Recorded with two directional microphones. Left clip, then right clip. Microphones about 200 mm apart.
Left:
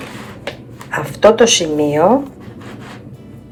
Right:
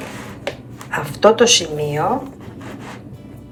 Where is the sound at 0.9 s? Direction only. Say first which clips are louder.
Left 3 dB; 25° right (ahead or behind).